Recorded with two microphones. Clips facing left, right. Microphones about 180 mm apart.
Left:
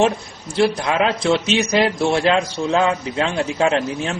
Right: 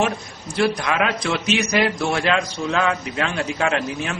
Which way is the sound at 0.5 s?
25° left (ahead or behind).